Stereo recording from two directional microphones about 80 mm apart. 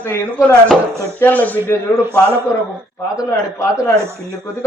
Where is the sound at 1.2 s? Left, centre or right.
Left.